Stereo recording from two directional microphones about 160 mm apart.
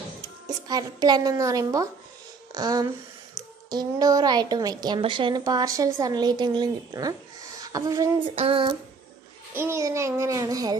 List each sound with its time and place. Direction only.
0.5 s a woman's voice: 25° right (ahead or behind)
8.4 s a sound: 35° right (ahead or behind)
9.5 s a woman's voice: 15° right (ahead or behind)